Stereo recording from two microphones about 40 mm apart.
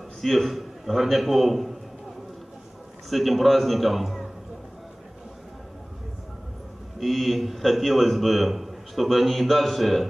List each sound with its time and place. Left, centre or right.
0.2 s a man's voice: centre
3.1 s a man's voice: centre
7.0 s a man's voice: centre